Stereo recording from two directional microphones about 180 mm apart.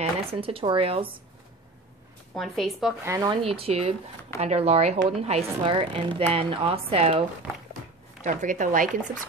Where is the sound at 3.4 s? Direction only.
30° right (ahead or behind).